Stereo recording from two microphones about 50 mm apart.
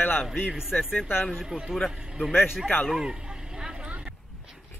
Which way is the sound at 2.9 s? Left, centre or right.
Centre.